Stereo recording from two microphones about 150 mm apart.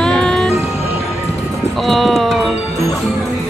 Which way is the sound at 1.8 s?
Centre (ahead or behind).